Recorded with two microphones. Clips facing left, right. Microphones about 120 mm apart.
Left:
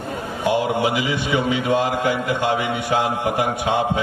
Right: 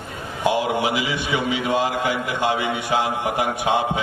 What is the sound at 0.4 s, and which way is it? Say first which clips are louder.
A man's voice: left 1 dB; 15° right (ahead or behind).